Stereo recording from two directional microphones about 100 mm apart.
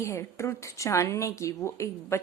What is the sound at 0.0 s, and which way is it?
A woman's voice, 30° left (ahead or behind).